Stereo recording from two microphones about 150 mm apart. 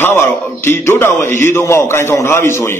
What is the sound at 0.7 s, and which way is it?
A man's voice, 15° left (ahead or behind).